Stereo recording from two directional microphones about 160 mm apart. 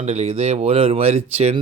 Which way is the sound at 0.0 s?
45° right (ahead or behind).